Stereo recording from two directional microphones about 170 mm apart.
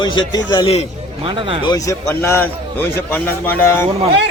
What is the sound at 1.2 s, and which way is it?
Speech, 30° right (ahead or behind).